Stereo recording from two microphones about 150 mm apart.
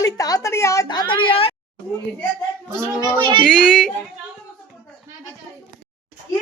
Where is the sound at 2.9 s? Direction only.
30° right (ahead or behind).